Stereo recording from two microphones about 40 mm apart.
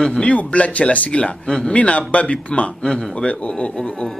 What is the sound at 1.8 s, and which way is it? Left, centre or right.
A man's voice, left.